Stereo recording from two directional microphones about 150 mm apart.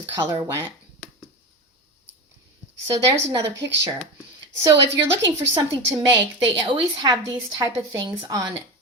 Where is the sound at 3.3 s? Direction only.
20° right (ahead or behind).